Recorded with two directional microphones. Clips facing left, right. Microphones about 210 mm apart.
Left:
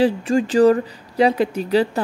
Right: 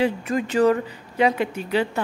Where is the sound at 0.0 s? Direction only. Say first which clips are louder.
Left 5 dB; 30° left (ahead or behind).